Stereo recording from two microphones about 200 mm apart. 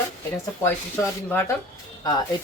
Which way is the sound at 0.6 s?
10° left (ahead or behind).